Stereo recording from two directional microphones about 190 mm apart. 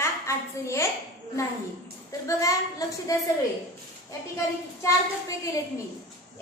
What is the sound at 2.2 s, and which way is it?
Speech, 15° left (ahead or behind).